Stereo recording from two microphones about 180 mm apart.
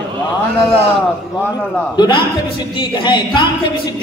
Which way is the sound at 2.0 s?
25° left (ahead or behind).